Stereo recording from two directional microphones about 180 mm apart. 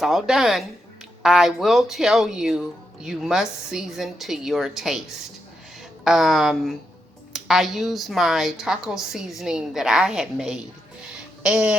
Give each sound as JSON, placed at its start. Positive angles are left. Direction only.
{"t": 0.0, "sound": "speech", "side_deg": 0}